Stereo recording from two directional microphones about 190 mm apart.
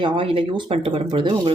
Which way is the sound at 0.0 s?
25° right (ahead or behind).